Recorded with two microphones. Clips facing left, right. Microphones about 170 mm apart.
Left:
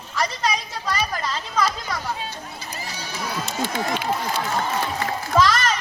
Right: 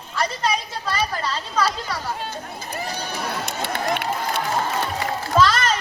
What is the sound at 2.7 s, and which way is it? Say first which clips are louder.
Run: right 6 dB; 60° right (ahead or behind).